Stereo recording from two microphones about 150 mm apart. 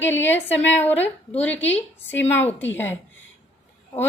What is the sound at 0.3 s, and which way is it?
A woman's voice, 15° left (ahead or behind).